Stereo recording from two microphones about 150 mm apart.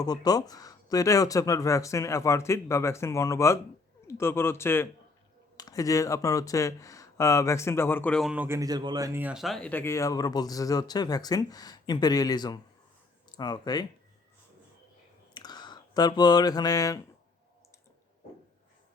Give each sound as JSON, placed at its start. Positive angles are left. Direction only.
{"t": 0.0, "sound": "speech", "side_deg": 25}
{"t": 8.3, "sound": "speech", "side_deg": -15}
{"t": 9.3, "sound": "speech", "side_deg": 0}
{"t": 15.4, "sound": "speech", "side_deg": 30}